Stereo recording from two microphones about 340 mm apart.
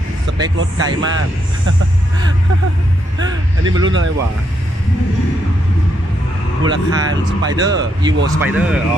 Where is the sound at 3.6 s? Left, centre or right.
Right.